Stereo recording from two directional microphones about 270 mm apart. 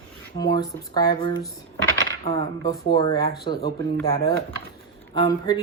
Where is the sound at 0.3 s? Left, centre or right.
Centre.